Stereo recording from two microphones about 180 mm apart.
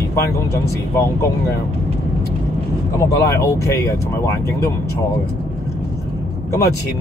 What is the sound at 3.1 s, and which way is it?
Speech, 15° left (ahead or behind).